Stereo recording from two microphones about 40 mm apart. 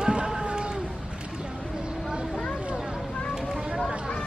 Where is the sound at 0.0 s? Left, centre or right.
Right.